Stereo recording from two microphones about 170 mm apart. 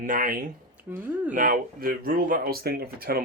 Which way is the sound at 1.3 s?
55° right (ahead or behind).